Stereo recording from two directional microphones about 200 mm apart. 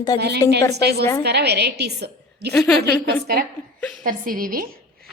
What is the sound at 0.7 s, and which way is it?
A woman's voice, 55° right (ahead or behind).